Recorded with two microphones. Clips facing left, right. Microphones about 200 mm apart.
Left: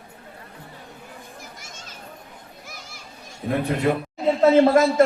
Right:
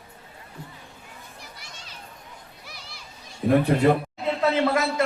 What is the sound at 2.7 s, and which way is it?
Children playing, 45° left (ahead or behind).